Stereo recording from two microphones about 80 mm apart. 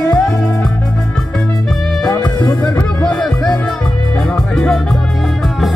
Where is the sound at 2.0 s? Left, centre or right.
Left.